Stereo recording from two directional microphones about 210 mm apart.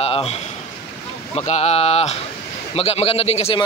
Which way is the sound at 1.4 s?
30° left (ahead or behind).